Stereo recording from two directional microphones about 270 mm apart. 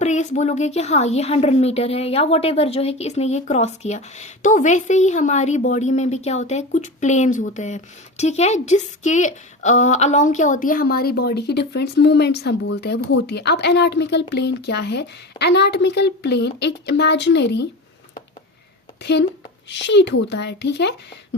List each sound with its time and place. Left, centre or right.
0.0 s a woman's voice: left
19.7 s a woman's voice: left